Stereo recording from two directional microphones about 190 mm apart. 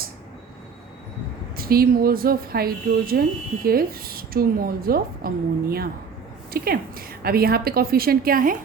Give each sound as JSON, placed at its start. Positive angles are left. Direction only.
{"t": 1.5, "sound": "speech", "side_deg": -50}